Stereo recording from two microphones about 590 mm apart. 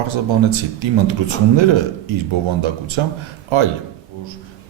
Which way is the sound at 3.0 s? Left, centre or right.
Right.